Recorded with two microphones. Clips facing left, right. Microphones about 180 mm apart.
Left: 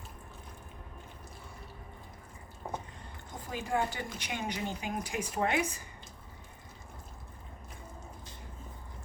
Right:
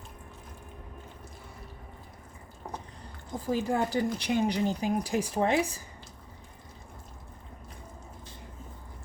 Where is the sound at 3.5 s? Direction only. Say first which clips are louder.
Right 6 dB; 35° right (ahead or behind).